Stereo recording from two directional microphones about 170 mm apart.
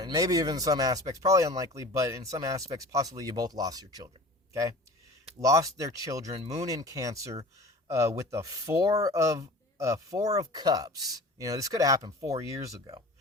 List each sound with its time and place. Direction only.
0.0 s speech: 20° right (ahead or behind)
5.4 s speech: 20° right (ahead or behind)